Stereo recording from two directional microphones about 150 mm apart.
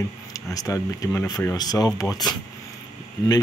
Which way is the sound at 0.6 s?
20° left (ahead or behind).